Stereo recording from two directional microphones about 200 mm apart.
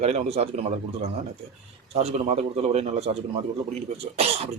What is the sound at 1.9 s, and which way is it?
A man's voice, 30° right (ahead or behind).